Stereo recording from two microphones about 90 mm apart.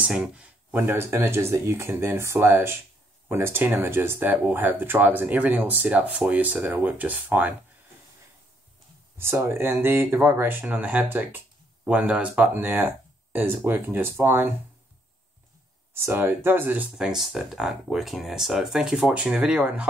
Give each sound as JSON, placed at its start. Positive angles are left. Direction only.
{"t": 0.0, "sound": "speech", "side_deg": -10}
{"t": 0.8, "sound": "speech", "side_deg": -25}
{"t": 9.2, "sound": "speech", "side_deg": -30}
{"t": 15.9, "sound": "speech", "side_deg": -25}
{"t": 16.9, "sound": "speech", "side_deg": -5}